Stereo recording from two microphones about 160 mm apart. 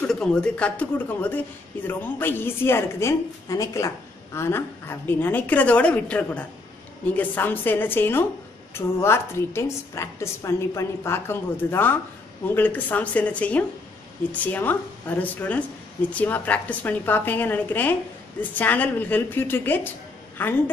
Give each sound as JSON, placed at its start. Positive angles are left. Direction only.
{"t": 0.0, "sound": "a woman's voice", "side_deg": 5}